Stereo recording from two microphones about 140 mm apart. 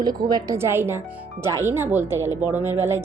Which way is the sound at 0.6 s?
15° right (ahead or behind).